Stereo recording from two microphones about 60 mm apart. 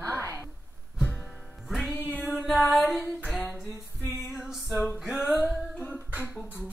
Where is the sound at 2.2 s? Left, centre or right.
Centre.